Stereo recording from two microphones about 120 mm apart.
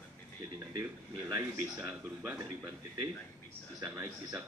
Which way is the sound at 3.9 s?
25° right (ahead or behind).